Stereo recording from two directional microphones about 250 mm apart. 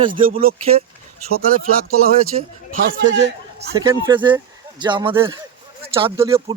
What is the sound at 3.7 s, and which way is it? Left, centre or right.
Speech, centre.